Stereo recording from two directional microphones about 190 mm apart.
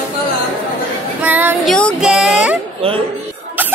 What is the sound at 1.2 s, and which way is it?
Speech, 10° right (ahead or behind).